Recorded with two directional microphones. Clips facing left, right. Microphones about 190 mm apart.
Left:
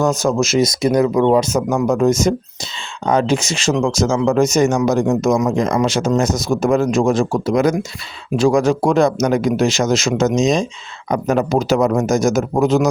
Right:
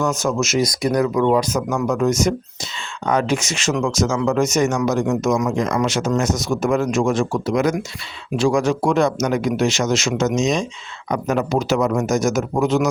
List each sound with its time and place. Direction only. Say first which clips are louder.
0.0 s speech: left 4 dB; 35° left (ahead or behind)